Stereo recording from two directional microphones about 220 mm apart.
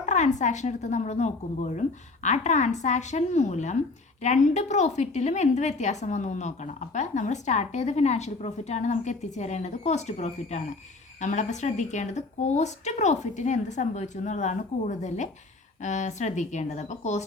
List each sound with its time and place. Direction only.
0.0 s a woman's voice: 35° left (ahead or behind)